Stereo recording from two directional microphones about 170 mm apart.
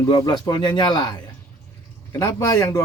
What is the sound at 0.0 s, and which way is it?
A man's voice, 20° left (ahead or behind).